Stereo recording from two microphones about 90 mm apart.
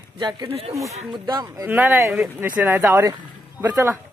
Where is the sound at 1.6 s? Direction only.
25° right (ahead or behind).